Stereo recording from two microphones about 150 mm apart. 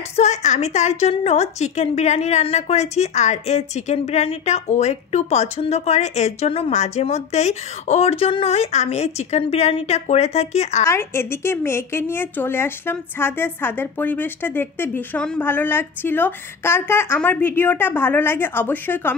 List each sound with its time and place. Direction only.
0.1 s a woman's voice: 50° left (ahead or behind)
10.9 s a woman's voice: 15° left (ahead or behind)